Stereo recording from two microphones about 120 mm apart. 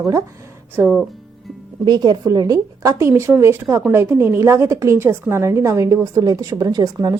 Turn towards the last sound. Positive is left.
turn(degrees=-30)  # may be behind; listen again after turning